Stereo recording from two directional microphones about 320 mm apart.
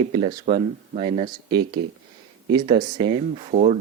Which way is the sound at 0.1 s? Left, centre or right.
Centre.